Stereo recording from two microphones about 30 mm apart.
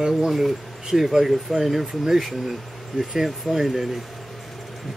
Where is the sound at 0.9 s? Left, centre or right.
Centre.